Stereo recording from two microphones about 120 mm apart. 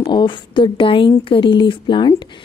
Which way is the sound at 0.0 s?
40° left (ahead or behind).